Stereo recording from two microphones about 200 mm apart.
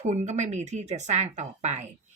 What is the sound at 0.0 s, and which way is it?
Speech, 35° right (ahead or behind).